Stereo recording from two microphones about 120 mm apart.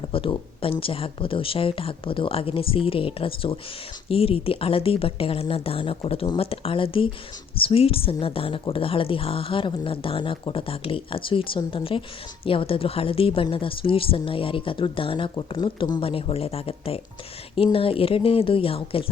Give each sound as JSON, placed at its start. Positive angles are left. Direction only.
{"t": 0.1, "sound": "a woman's voice", "side_deg": 50}